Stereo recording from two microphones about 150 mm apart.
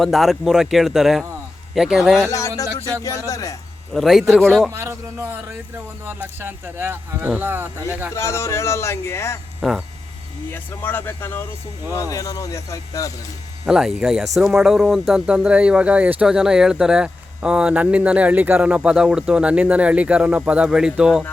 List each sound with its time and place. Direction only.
0.0 s speech: centre (ahead or behind)
3.2 s speech: 20° left (ahead or behind)
3.9 s speech: centre (ahead or behind)
4.7 s speech: 20° right (ahead or behind)
8.1 s speech: 20° left (ahead or behind)
9.6 s speech: centre (ahead or behind)
10.5 s speech: 15° left (ahead or behind)
13.7 s speech: 5° right (ahead or behind)